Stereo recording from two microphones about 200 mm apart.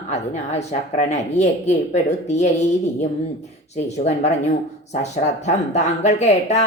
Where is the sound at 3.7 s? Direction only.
35° left (ahead or behind).